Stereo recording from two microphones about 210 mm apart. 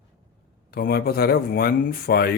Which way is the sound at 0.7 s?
50° left (ahead or behind).